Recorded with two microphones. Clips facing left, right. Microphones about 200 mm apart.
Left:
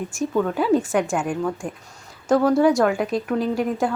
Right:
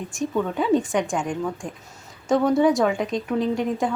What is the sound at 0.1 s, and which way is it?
A woman's voice, centre (ahead or behind).